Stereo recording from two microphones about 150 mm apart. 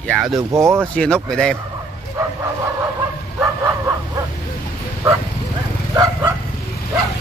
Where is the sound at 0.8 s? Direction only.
10° left (ahead or behind).